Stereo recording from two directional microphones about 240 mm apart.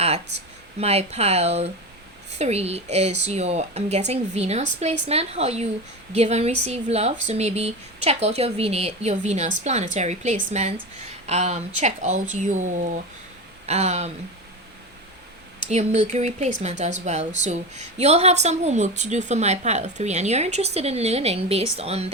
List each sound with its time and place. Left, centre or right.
0.8 s speech: right
15.6 s speech: right